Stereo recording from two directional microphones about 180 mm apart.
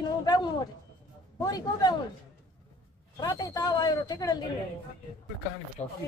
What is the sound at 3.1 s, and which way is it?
Speech, 20° left (ahead or behind).